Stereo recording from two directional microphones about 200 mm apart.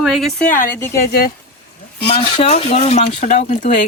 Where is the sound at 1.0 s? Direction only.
50° left (ahead or behind).